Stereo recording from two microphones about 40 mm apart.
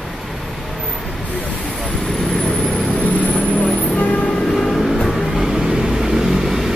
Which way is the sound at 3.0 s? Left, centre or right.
Left.